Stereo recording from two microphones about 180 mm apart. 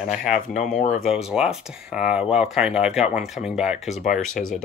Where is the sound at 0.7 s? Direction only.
40° left (ahead or behind).